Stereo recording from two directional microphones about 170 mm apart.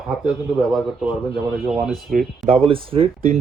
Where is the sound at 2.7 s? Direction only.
35° right (ahead or behind).